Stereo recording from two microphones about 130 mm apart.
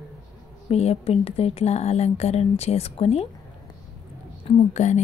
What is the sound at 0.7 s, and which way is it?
Speech, 50° left (ahead or behind).